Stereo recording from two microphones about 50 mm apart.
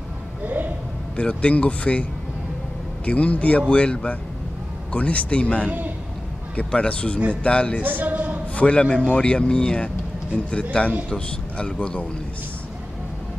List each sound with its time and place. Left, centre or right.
1.1 s speech: left
3.1 s speech: left
7.8 s speech: right
8.5 s speech: left